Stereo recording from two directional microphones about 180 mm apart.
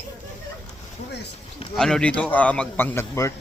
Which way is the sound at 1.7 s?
5° left (ahead or behind).